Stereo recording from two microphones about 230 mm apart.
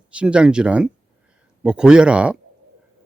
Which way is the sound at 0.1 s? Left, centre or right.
Centre.